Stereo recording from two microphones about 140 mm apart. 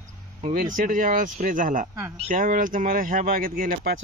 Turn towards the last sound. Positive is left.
turn(degrees=-85)